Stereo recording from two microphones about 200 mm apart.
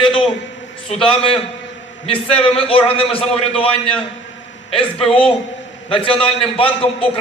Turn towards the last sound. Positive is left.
turn(degrees=30)  # may be behind; listen again after turning